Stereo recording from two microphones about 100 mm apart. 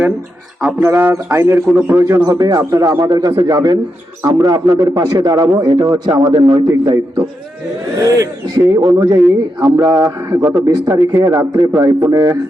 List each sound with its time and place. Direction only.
0.6 s a man's voice: 25° right (ahead or behind)
2.2 s a man's voice: 40° right (ahead or behind)
8.0 s a man's voice: 35° right (ahead or behind)